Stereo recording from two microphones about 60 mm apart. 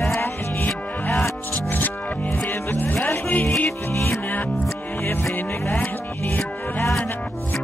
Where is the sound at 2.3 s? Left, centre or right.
Left.